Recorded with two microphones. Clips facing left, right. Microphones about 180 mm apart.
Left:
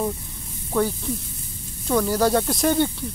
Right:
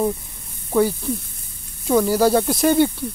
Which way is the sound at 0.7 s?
5° right (ahead or behind).